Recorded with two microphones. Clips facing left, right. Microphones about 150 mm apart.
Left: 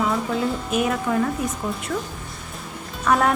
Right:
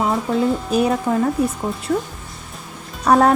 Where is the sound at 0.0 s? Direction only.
35° right (ahead or behind).